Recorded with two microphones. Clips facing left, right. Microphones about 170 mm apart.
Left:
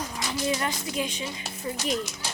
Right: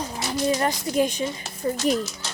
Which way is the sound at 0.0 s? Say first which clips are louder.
Right 4 dB; 30° right (ahead or behind).